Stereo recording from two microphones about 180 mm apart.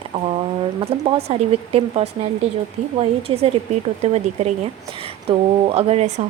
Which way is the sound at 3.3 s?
30° right (ahead or behind).